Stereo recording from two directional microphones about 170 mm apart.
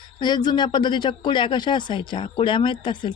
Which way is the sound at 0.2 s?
25° left (ahead or behind).